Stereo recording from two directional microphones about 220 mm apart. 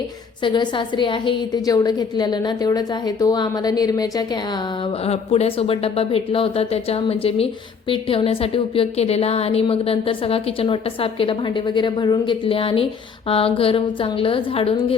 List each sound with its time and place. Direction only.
0.4 s speech: 20° left (ahead or behind)
5.0 s speech: 30° left (ahead or behind)